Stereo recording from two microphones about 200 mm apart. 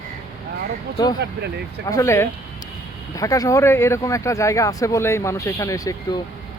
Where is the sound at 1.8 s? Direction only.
15° left (ahead or behind).